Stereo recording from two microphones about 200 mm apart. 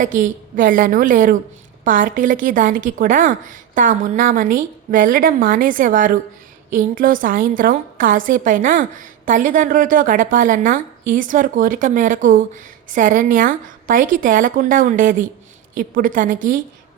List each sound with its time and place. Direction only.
0.0 s a woman's voice: 40° right (ahead or behind)